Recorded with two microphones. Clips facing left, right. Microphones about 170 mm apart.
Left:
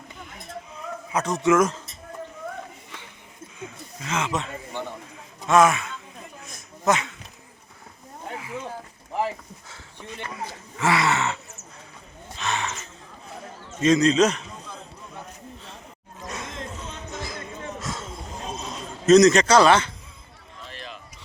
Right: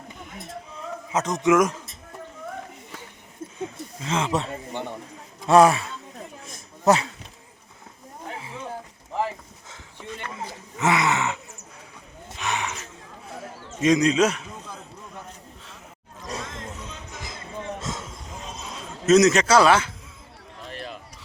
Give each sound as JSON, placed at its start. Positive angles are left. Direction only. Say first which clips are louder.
{"t": 1.1, "sound": "speech", "louder": "even", "side_deg": -20}
{"t": 3.6, "sound": "a sound", "louder": "right 5 dB", "side_deg": -30}
{"t": 5.5, "sound": "speech", "louder": "right 2 dB", "side_deg": -35}
{"t": 10.3, "sound": "speech", "louder": "even", "side_deg": -20}
{"t": 12.4, "sound": "wild animals", "louder": "even", "side_deg": -15}
{"t": 13.8, "sound": "a man's voice", "louder": "left 1 dB", "side_deg": -15}
{"t": 17.2, "sound": "a sound", "louder": "even", "side_deg": -25}
{"t": 19.0, "sound": "speech", "louder": "left 2 dB", "side_deg": -5}
{"t": 20.7, "sound": "run", "louder": "right 4 dB", "side_deg": -45}